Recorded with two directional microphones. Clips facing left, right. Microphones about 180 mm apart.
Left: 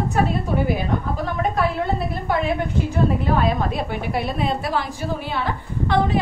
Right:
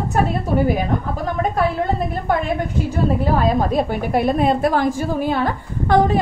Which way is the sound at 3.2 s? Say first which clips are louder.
Right 3 dB; 40° right (ahead or behind).